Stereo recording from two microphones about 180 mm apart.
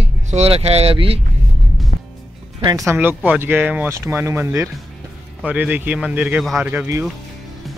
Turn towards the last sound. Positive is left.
turn(degrees=-10)  # may be behind; listen again after turning